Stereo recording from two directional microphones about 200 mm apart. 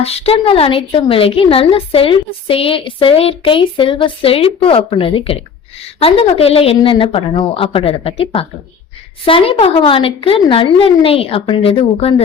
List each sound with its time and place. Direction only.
0.0 s a woman's voice: 30° left (ahead or behind)